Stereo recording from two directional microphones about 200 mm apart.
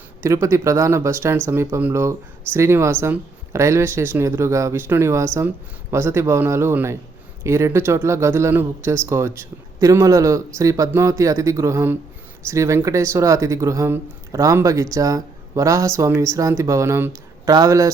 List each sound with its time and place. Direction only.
0.2 s speech: 15° right (ahead or behind)